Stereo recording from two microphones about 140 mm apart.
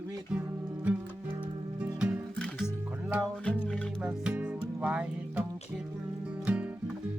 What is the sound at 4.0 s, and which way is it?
Music, 10° right (ahead or behind).